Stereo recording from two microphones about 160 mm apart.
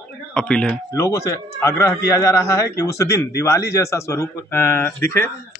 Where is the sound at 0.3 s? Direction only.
5° left (ahead or behind).